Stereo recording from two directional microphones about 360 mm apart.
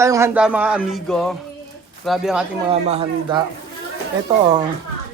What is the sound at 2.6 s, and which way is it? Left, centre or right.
Speech, centre.